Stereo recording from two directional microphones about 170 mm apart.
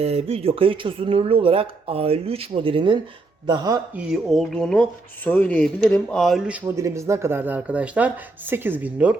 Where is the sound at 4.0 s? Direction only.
Centre (ahead or behind).